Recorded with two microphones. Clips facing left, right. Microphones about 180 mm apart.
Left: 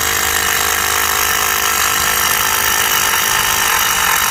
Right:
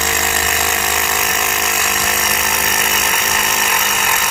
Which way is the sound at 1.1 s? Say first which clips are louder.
Right 1 dB; 10° right (ahead or behind).